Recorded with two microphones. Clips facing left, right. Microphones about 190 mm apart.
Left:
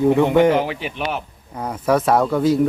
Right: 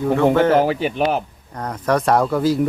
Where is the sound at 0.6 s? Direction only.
40° right (ahead or behind).